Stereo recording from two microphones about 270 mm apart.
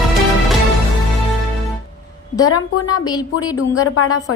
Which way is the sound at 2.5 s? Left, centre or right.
Left.